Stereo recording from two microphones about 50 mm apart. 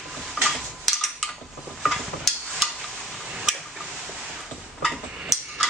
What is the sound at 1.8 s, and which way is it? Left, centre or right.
Stir, centre.